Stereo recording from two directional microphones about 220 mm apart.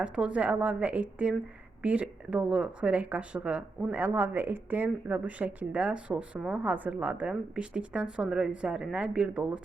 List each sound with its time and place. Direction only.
0.0 s speech: 5° right (ahead or behind)